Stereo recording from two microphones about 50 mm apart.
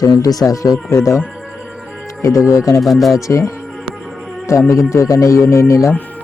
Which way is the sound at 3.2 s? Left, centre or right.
Left.